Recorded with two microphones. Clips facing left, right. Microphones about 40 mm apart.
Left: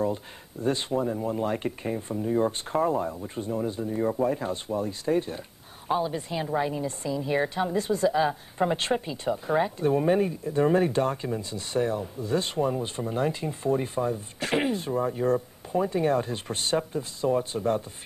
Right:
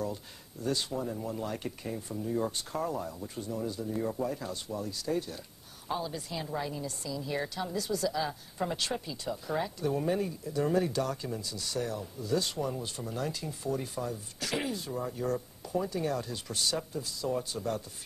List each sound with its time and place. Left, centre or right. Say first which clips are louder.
0.0 s a woman's voice: left 8 dB; left